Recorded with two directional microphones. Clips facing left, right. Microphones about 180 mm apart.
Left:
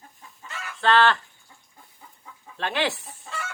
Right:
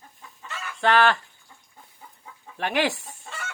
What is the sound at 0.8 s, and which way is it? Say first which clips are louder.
Speech: even; 15° right (ahead or behind).